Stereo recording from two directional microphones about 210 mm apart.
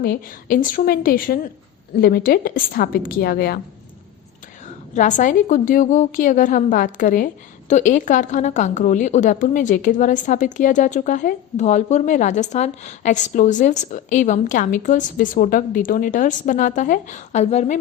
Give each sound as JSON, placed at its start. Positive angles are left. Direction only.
{"t": 0.0, "sound": "a woman's voice", "side_deg": 45}
{"t": 4.9, "sound": "a woman's voice", "side_deg": 35}